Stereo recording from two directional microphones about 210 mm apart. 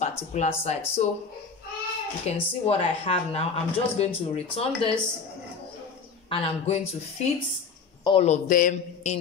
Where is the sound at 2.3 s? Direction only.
30° left (ahead or behind).